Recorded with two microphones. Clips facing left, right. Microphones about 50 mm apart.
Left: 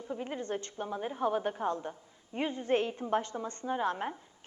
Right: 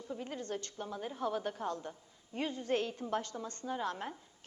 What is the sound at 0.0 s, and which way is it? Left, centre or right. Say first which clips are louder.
A woman's voice: left 4 dB; left.